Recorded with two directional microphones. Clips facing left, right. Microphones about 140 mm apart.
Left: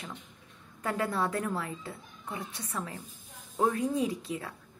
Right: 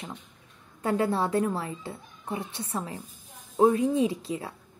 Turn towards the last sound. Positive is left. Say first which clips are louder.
# right 5 dB
turn(degrees=-30)  # may be behind; listen again after turning